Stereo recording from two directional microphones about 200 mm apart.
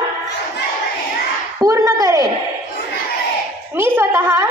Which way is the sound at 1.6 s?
15° right (ahead or behind).